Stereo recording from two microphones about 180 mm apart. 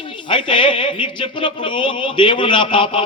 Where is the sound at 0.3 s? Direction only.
25° left (ahead or behind).